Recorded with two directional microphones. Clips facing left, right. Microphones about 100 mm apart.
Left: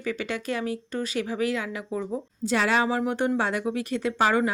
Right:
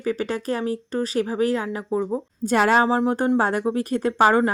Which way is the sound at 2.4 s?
50° right (ahead or behind).